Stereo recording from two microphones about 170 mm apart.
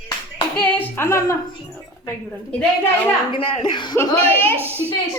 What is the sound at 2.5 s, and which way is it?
Speech, 5° left (ahead or behind).